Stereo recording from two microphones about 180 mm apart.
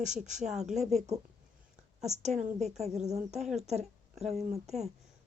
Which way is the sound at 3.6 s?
35° right (ahead or behind).